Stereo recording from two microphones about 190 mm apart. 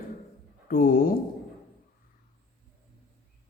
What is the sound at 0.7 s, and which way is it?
Speech, 50° left (ahead or behind).